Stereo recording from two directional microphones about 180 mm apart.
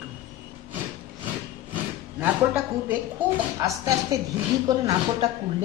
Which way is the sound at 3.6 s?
20° right (ahead or behind).